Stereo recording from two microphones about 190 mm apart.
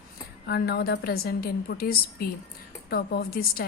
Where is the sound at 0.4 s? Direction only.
55° left (ahead or behind).